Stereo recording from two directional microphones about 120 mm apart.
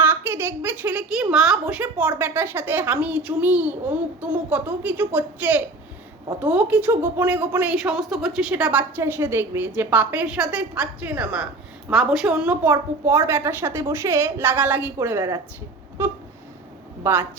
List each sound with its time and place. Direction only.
0.0 s a woman's voice: 15° right (ahead or behind)
12.7 s a woman's voice: 25° right (ahead or behind)
17.0 s speech: 20° right (ahead or behind)